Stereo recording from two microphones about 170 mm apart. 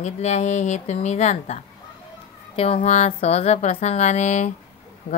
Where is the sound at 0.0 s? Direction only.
40° left (ahead or behind).